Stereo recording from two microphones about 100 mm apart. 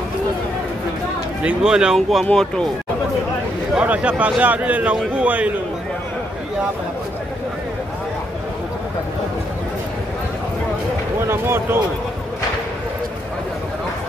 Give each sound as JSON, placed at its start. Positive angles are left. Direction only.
{"t": 1.4, "sound": "a man's voice", "side_deg": -5}
{"t": 3.7, "sound": "a man's voice", "side_deg": -15}
{"t": 11.2, "sound": "speech", "side_deg": -25}